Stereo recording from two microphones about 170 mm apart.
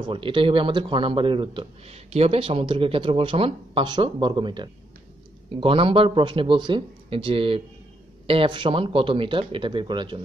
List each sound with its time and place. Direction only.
0.0 s speech: 30° right (ahead or behind)